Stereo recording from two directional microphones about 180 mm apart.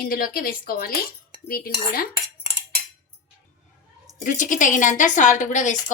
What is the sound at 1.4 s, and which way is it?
Cutlery, 55° left (ahead or behind).